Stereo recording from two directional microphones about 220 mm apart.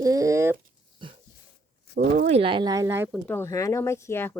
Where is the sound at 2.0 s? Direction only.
30° right (ahead or behind); by 3.1 s 10° right (ahead or behind).